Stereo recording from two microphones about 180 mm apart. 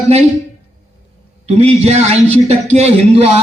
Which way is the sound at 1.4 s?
35° right (ahead or behind).